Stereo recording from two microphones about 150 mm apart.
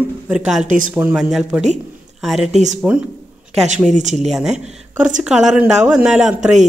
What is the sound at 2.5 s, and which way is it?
Speech, 50° right (ahead or behind).